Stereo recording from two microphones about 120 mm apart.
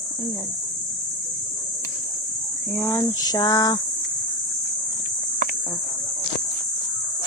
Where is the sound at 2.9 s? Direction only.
30° left (ahead or behind).